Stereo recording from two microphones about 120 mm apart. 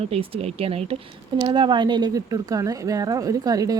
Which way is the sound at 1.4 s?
40° right (ahead or behind).